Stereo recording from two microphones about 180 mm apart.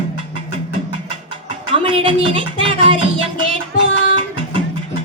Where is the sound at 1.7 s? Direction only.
30° right (ahead or behind).